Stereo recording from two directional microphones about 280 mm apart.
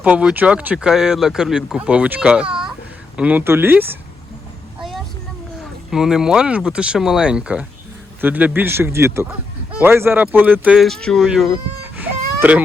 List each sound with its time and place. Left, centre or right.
0.0 s speech: centre
4.8 s vehicle: centre
5.9 s speech: centre
11.9 s baby cry: centre